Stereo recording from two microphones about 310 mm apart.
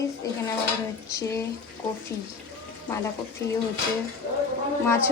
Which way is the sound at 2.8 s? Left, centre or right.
Centre.